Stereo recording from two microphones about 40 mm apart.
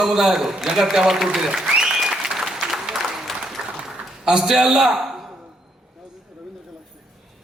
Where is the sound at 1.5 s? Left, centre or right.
Centre.